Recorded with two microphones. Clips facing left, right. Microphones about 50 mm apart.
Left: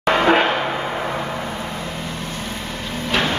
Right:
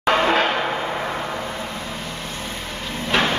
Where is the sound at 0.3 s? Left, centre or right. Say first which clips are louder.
Left 3 dB; left.